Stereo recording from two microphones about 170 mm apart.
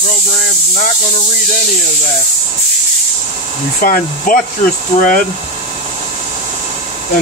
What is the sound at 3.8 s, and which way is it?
Speech, 55° left (ahead or behind).